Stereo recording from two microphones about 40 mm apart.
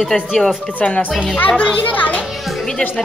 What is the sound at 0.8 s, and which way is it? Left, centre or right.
Speech, left.